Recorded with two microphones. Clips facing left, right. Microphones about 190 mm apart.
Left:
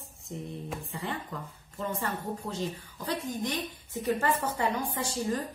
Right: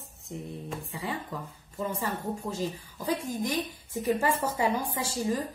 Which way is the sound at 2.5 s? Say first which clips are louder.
Right 2 dB; 5° right (ahead or behind).